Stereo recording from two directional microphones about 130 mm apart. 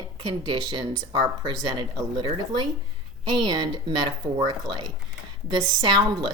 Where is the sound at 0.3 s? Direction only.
35° right (ahead or behind).